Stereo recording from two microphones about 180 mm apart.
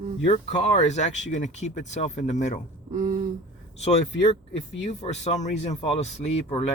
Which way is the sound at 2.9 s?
50° right (ahead or behind).